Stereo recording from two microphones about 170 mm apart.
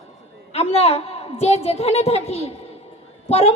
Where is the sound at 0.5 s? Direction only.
35° left (ahead or behind).